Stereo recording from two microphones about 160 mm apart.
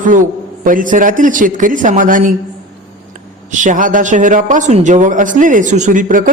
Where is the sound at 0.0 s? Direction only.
55° right (ahead or behind).